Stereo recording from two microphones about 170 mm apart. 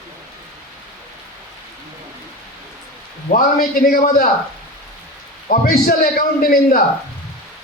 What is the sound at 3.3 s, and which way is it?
Speech, 55° left (ahead or behind).